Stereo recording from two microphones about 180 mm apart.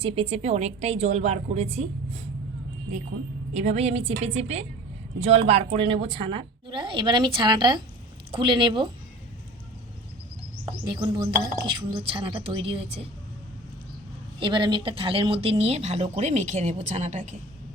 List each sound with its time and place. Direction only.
0.0 s speech: 35° right (ahead or behind)
3.5 s a woman's voice: 40° right (ahead or behind)
10.7 s a sound: 25° right (ahead or behind)
11.6 s a woman's voice: 30° right (ahead or behind)
14.3 s speech: 25° right (ahead or behind)